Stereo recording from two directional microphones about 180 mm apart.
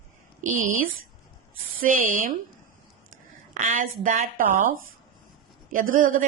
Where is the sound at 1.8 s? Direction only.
50° right (ahead or behind).